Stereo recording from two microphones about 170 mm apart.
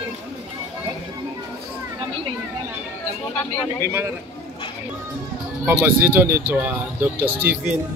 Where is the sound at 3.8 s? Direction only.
15° right (ahead or behind).